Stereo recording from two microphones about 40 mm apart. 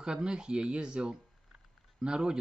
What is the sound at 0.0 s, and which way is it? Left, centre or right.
A man's voice, right.